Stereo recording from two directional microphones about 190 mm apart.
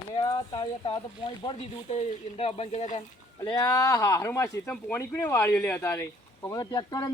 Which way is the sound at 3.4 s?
20° left (ahead or behind).